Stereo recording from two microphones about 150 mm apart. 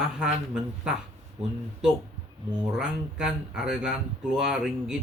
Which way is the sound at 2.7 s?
5° right (ahead or behind).